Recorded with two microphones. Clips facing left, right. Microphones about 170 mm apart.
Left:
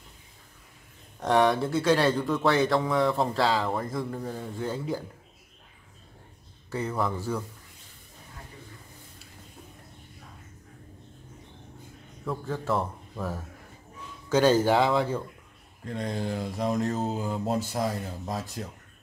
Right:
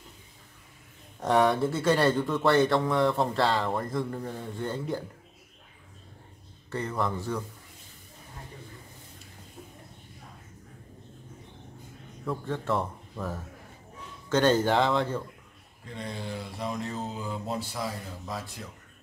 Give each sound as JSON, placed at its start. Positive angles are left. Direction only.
{"t": 1.2, "sound": "speech", "side_deg": 0}
{"t": 6.7, "sound": "speech", "side_deg": 5}
{"t": 12.3, "sound": "speech", "side_deg": 0}
{"t": 15.9, "sound": "mantra", "side_deg": 45}